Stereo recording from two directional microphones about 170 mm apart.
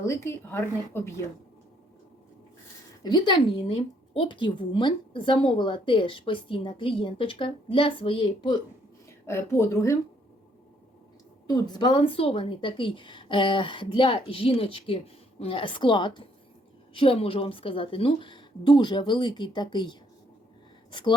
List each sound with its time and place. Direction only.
0.0 s speech: 15° left (ahead or behind)
3.0 s a woman's voice: 25° left (ahead or behind)
9.2 s speech: 15° left (ahead or behind)
11.4 s a woman's voice: 25° left (ahead or behind)